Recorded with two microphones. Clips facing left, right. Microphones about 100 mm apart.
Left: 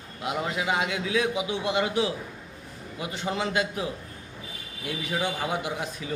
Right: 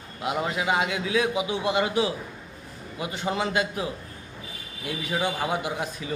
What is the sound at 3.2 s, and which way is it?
Speech, 40° right (ahead or behind).